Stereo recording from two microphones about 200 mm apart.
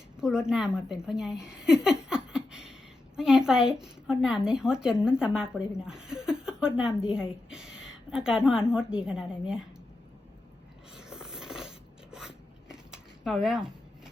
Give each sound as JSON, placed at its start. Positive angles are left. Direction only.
{"t": 0.2, "sound": "a woman's voice", "side_deg": -5}
{"t": 10.9, "sound": "a sound", "side_deg": -5}
{"t": 12.1, "sound": "zipper", "side_deg": -5}